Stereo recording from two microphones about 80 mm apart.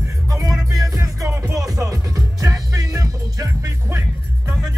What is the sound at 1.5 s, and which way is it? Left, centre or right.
Music, right.